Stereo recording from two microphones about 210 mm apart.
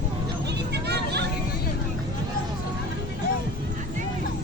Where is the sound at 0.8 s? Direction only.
50° right (ahead or behind).